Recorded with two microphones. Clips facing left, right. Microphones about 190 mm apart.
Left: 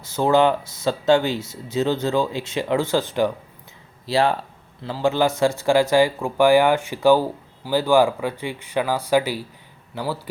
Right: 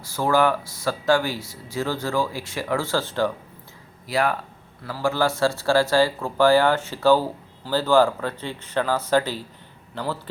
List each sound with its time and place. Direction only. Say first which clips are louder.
0.0 s speech: left 3 dB; 20° left (ahead or behind)
4.0 s a man's voice: left 3 dB; 30° left (ahead or behind); by 10.2 s 10° left (ahead or behind)